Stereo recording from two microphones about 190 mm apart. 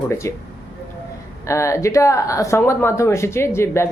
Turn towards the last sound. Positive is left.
turn(degrees=15)  # may be behind; listen again after turning